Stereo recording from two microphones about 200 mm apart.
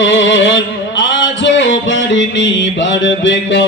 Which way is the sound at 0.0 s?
70° left (ahead or behind).